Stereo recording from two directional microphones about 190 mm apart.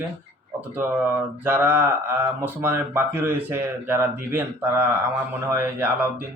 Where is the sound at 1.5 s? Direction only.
10° right (ahead or behind).